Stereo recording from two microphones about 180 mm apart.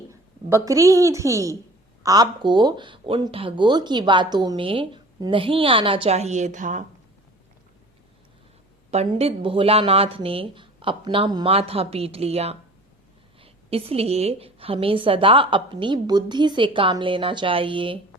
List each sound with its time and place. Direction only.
0.1 s a woman's voice: 15° right (ahead or behind); by 6.8 s 45° right (ahead or behind)
8.9 s speech: 35° right (ahead or behind)